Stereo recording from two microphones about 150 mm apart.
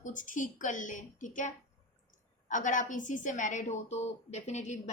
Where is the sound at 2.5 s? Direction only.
60° left (ahead or behind).